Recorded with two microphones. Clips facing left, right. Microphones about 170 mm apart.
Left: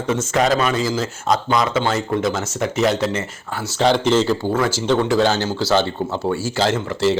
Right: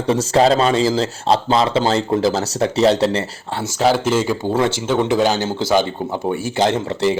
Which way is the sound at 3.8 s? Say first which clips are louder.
Even; 5° right (ahead or behind).